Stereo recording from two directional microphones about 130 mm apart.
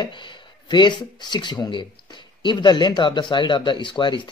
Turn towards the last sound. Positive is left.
turn(degrees=35)  # may be behind; listen again after turning